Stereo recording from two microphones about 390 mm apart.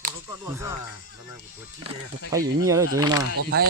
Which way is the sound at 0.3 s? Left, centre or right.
Centre.